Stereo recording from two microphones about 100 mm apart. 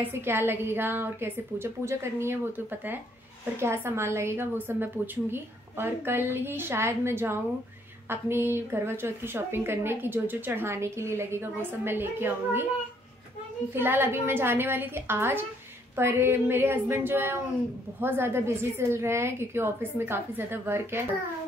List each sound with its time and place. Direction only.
0.0 s a woman's voice: 25° right (ahead or behind)
13.7 s a woman's voice: 20° right (ahead or behind)